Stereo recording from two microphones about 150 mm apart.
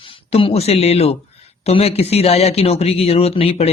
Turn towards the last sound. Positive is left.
turn(degrees=40)  # may be behind; listen again after turning